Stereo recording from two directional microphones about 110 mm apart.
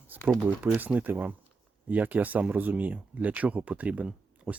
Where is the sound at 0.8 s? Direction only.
15° right (ahead or behind).